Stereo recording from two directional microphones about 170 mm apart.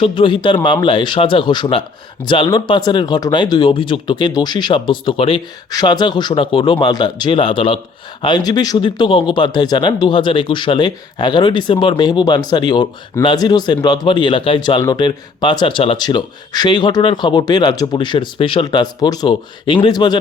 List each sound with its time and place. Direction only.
0.0 s speech: 30° left (ahead or behind)